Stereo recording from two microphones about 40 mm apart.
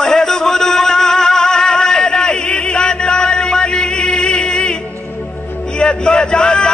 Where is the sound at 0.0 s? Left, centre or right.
Centre.